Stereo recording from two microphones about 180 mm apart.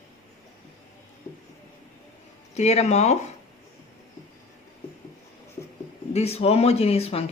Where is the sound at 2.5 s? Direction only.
40° left (ahead or behind).